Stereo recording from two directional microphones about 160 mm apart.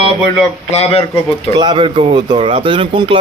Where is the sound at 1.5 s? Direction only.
30° right (ahead or behind).